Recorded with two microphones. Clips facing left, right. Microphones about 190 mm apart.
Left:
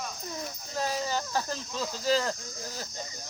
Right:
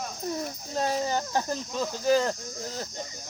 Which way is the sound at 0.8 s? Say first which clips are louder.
Right 3 dB; 25° right (ahead or behind).